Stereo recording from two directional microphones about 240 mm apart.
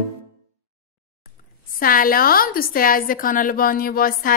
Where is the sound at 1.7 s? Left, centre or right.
Left.